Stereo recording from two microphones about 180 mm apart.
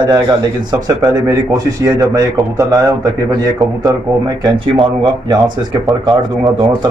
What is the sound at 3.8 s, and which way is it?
A man's voice, 20° right (ahead or behind).